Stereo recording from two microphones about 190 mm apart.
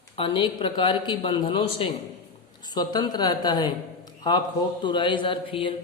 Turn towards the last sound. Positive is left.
turn(degrees=25)  # may be behind; listen again after turning